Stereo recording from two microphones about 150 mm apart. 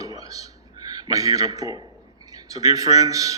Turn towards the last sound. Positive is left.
turn(degrees=-25)  # may be behind; listen again after turning